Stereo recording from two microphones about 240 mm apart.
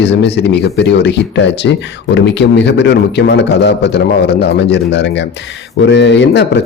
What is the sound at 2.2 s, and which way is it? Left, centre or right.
A man's voice, left.